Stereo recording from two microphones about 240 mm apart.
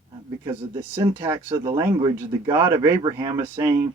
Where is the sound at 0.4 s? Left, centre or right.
Centre.